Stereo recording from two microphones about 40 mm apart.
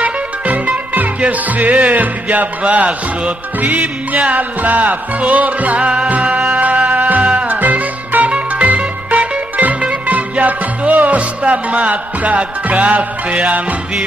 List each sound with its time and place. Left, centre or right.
0.0 s music: right